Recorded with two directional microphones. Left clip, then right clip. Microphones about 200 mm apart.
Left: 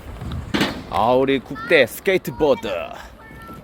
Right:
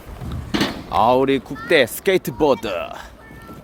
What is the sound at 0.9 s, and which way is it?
Speech, 5° right (ahead or behind).